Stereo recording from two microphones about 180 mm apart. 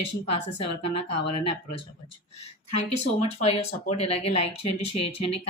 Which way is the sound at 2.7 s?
35° left (ahead or behind).